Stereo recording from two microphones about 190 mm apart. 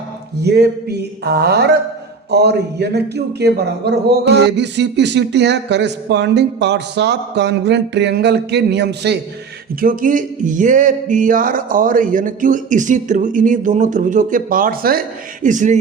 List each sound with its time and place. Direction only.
0.4 s speech: 60° right (ahead or behind)
9.8 s music: 45° right (ahead or behind)
15.4 s speech: 40° right (ahead or behind)